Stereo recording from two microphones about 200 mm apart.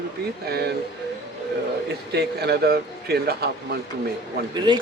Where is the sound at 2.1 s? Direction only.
55° right (ahead or behind).